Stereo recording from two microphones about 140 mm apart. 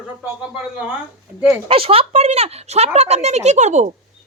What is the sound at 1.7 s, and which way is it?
Speech, 40° right (ahead or behind).